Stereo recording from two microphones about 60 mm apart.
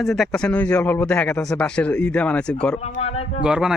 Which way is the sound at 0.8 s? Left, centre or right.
Left.